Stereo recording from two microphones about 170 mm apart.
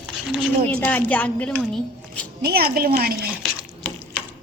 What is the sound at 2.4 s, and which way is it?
Speech, 65° right (ahead or behind).